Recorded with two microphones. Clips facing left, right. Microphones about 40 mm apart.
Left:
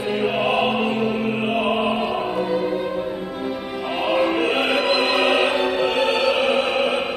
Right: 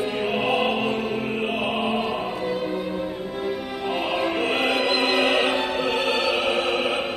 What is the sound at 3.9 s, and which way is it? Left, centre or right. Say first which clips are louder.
Music: left 4 dB; centre.